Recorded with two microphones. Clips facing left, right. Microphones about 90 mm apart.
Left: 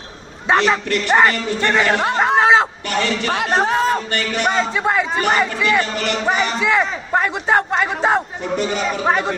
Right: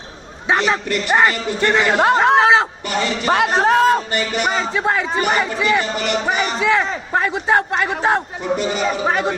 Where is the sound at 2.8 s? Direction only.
10° right (ahead or behind).